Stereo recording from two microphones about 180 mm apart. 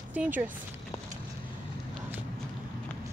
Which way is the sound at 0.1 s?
10° right (ahead or behind).